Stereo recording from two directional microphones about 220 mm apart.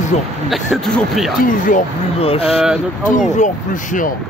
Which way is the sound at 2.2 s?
25° left (ahead or behind).